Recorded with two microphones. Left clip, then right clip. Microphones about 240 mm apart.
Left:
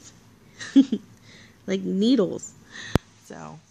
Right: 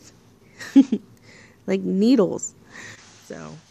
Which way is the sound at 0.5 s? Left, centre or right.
Centre.